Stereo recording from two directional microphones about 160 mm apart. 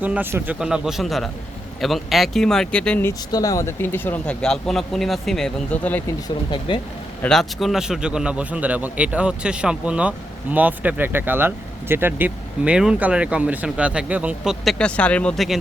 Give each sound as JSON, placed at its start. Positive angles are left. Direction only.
{"t": 0.0, "sound": "a man's voice", "side_deg": -10}
{"t": 3.1, "sound": "speech", "side_deg": 20}
{"t": 6.2, "sound": "speech", "side_deg": 30}
{"t": 7.2, "sound": "a man's voice", "side_deg": 5}